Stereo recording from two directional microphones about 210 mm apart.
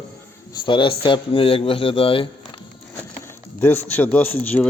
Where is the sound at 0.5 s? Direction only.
25° left (ahead or behind).